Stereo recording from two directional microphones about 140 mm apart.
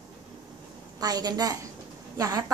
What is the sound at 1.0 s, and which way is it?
Speech, 25° right (ahead or behind).